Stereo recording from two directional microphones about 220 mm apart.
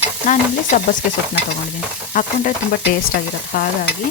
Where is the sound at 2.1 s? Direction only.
35° left (ahead or behind).